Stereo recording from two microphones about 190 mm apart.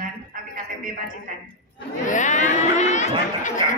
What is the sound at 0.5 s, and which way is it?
Music, 45° right (ahead or behind).